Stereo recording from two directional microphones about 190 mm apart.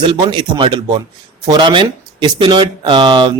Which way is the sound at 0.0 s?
25° right (ahead or behind).